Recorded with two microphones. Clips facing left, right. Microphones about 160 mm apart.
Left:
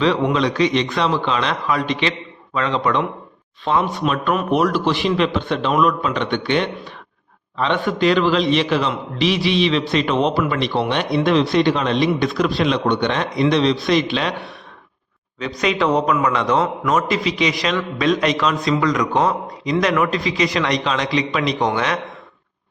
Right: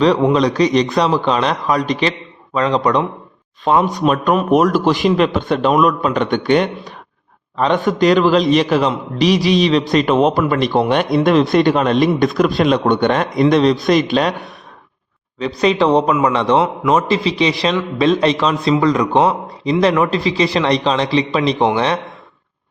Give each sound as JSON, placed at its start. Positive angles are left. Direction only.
{"t": 0.0, "sound": "a man's voice", "side_deg": -35}
{"t": 15.4, "sound": "a man's voice", "side_deg": -30}